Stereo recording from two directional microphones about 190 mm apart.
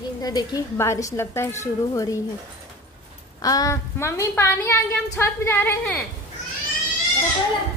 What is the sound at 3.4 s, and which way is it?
A woman's voice, 20° left (ahead or behind).